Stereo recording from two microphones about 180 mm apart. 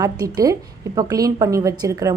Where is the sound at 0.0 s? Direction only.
20° right (ahead or behind).